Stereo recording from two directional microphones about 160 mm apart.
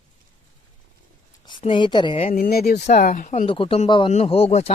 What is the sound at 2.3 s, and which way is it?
Speech, 70° left (ahead or behind).